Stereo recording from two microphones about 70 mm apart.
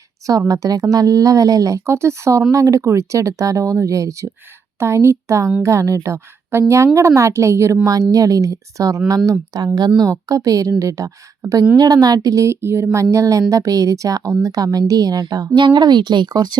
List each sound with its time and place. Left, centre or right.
0.3 s a woman's voice: right
1.9 s a woman's voice: right
8.1 s a woman's voice: right
11.8 s a woman's voice: right
12.6 s a woman's voice: right
15.6 s speech: right